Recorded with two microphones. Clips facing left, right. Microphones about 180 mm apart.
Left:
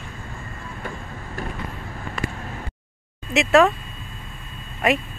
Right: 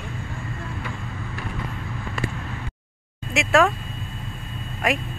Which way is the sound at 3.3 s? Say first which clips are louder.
Left 3 dB; centre (ahead or behind).